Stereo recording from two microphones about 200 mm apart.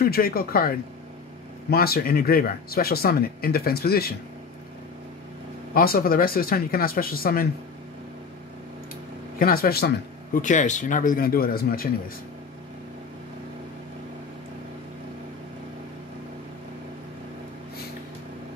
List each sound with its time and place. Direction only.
0.0 s speech: 50° left (ahead or behind)
5.8 s speech: 45° left (ahead or behind)
9.4 s speech: 50° left (ahead or behind)